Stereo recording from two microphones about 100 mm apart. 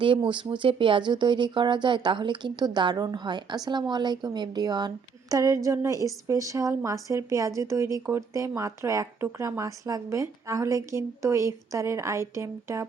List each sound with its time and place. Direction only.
0.0 s speech: 55° right (ahead or behind)
5.3 s a woman's voice: 35° right (ahead or behind)